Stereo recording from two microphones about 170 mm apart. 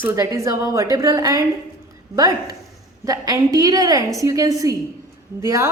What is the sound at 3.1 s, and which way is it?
A woman's voice, 20° right (ahead or behind).